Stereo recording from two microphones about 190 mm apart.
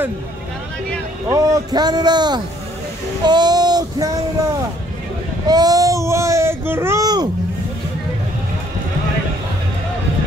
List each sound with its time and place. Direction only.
1.2 s a man's voice: 15° right (ahead or behind)
3.3 s a sound: 20° right (ahead or behind)
5.5 s baby cry: 20° right (ahead or behind)